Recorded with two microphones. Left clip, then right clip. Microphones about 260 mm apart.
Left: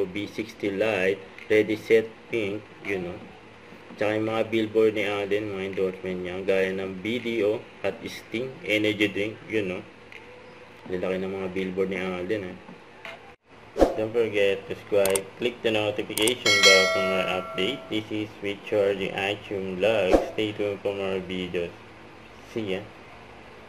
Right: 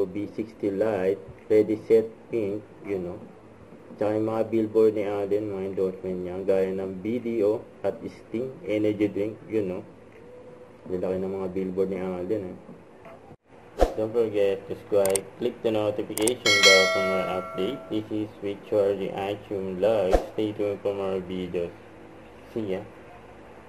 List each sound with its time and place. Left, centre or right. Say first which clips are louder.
0.4 s speech: even; left
4.0 s speech: even; left
11.0 s speech: even; left
13.7 s speech: left 2 dB; centre